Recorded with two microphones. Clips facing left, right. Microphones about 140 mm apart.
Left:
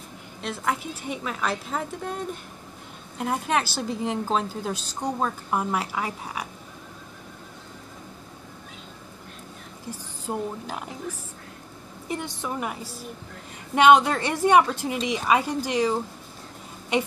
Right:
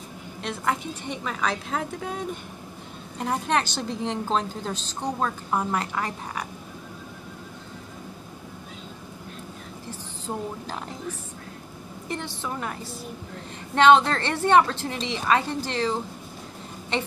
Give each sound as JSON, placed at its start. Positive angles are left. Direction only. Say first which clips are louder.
{"t": 0.4, "sound": "a woman's voice", "louder": "even", "side_deg": 0}
{"t": 9.8, "sound": "a woman's voice", "louder": "left 2 dB", "side_deg": 10}
{"t": 12.1, "sound": "a woman's voice", "louder": "left 1 dB", "side_deg": 15}